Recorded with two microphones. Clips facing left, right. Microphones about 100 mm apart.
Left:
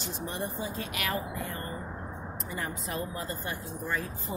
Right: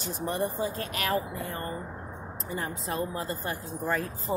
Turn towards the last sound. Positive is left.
turn(degrees=-45)  # may be behind; listen again after turning